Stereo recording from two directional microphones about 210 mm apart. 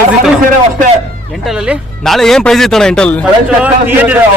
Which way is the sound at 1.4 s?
5° right (ahead or behind).